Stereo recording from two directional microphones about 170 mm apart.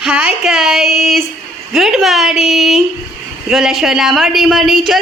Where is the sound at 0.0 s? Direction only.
5° right (ahead or behind).